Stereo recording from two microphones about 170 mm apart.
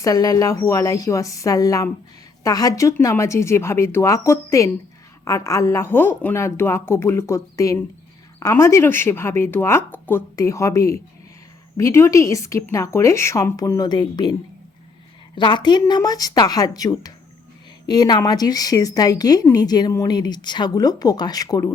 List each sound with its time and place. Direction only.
0.0 s a woman's voice: 20° left (ahead or behind)
15.4 s a woman's voice: 25° left (ahead or behind)